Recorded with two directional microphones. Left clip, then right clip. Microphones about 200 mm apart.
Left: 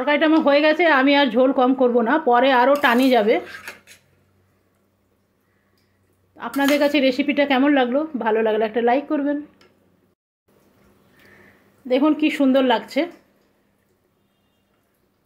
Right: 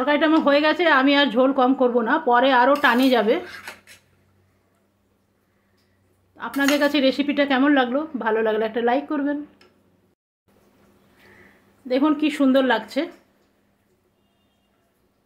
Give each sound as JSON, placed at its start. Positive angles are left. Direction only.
{"t": 0.0, "sound": "a woman's voice", "side_deg": 20}
{"t": 6.3, "sound": "a woman's voice", "side_deg": 10}
{"t": 11.9, "sound": "a woman's voice", "side_deg": 10}